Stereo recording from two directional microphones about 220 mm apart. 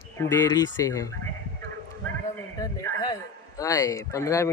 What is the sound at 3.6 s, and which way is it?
Speech, 15° left (ahead or behind).